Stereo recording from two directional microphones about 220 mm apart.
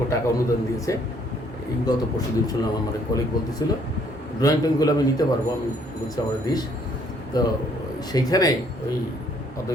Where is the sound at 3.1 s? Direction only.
15° left (ahead or behind).